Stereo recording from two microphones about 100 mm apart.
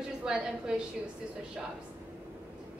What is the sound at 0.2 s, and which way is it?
Speech, 10° right (ahead or behind).